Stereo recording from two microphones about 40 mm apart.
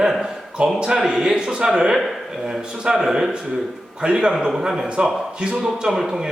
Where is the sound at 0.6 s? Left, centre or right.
Right.